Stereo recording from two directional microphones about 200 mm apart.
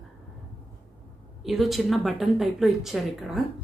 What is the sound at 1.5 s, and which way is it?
A woman's voice, centre (ahead or behind).